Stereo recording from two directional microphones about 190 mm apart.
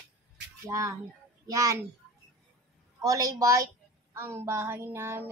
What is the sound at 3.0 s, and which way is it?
Speech, 20° right (ahead or behind).